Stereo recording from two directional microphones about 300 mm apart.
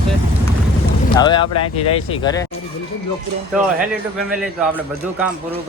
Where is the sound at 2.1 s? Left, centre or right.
Centre.